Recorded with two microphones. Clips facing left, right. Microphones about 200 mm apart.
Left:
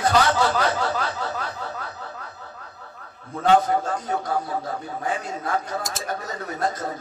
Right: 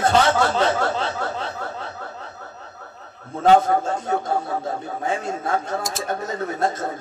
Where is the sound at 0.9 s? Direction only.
25° right (ahead or behind).